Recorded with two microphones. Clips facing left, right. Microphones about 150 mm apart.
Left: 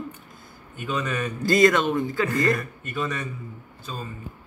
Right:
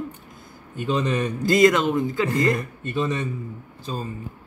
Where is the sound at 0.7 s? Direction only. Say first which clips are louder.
Right 5 dB; 30° right (ahead or behind).